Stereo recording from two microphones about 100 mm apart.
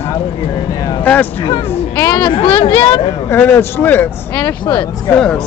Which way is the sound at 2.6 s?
50° left (ahead or behind).